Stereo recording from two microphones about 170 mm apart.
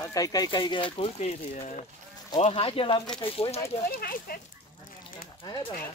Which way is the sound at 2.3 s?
35° left (ahead or behind).